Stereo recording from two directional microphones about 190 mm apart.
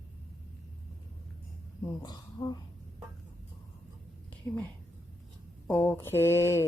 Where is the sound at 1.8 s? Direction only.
20° left (ahead or behind).